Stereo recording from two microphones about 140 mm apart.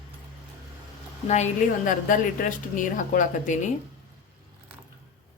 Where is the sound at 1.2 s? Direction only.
55° left (ahead or behind).